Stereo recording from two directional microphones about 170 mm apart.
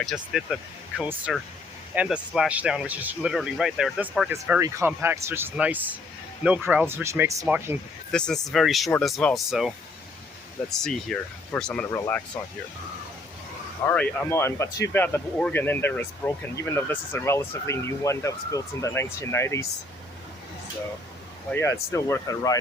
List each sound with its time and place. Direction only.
0.0 s speech: centre (ahead or behind)
8.1 s speech: 5° left (ahead or behind)
13.8 s speech: 5° left (ahead or behind)
21.5 s speech: 15° left (ahead or behind)